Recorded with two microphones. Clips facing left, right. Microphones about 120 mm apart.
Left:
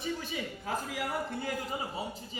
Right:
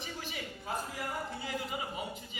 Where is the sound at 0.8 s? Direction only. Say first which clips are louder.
Left 4 dB; 90° left.